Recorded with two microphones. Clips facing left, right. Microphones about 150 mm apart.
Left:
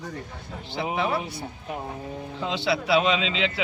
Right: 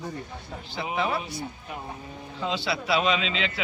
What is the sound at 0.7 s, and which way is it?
Speech, 20° left (ahead or behind).